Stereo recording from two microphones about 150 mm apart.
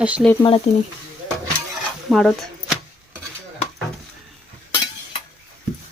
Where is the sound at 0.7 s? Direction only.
45° left (ahead or behind).